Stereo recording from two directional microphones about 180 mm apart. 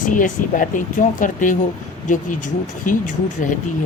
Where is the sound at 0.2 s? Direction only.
45° left (ahead or behind).